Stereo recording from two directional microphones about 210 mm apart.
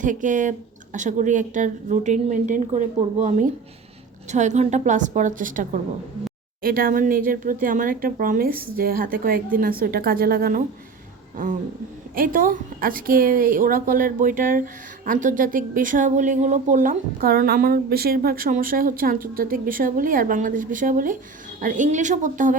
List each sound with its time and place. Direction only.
0.0 s a woman's voice: 35° right (ahead or behind)
12.1 s a woman's voice: 40° right (ahead or behind)